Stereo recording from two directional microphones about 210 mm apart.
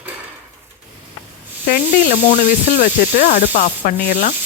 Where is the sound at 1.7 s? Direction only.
35° left (ahead or behind).